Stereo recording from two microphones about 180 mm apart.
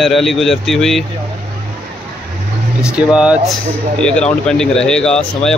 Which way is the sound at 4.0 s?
5° left (ahead or behind).